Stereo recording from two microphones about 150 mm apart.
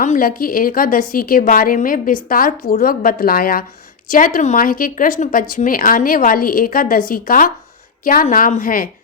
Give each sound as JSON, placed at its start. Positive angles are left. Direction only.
{"t": 0.0, "sound": "speech", "side_deg": 65}
{"t": 4.1, "sound": "speech", "side_deg": 65}